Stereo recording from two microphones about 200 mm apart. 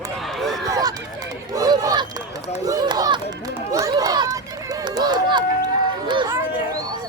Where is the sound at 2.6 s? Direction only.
20° right (ahead or behind).